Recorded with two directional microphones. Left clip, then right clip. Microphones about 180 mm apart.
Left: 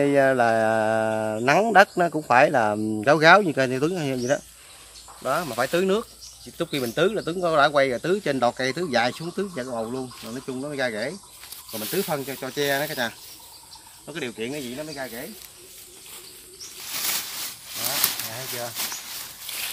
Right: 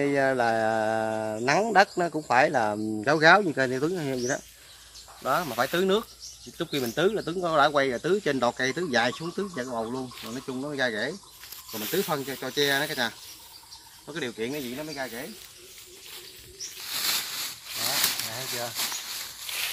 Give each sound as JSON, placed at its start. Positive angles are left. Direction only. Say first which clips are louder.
{"t": 0.0, "sound": "speech", "louder": "left 5 dB", "side_deg": 60}
{"t": 5.2, "sound": "speech", "louder": "left 1 dB", "side_deg": 20}
{"t": 16.9, "sound": "a sound", "louder": "even", "side_deg": 5}
{"t": 19.5, "sound": "walk", "louder": "right 1 dB", "side_deg": -5}